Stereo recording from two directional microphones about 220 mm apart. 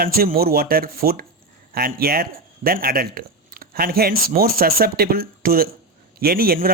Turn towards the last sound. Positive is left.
turn(degrees=-40)  # may be behind; listen again after turning